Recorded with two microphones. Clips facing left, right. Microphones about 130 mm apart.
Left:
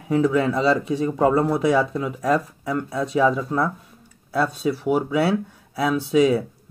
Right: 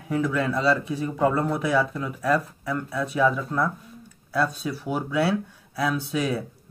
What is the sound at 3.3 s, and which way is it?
Speech, 15° left (ahead or behind).